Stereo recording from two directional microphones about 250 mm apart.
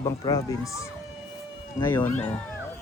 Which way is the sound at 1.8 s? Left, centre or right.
Centre.